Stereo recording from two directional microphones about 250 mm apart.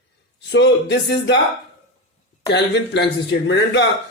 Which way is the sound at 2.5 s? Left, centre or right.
Left.